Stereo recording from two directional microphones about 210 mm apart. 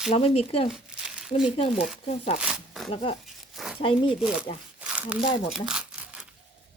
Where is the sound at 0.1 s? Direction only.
30° left (ahead or behind).